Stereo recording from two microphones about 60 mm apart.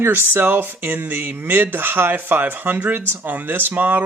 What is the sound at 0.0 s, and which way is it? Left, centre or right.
Speech, right.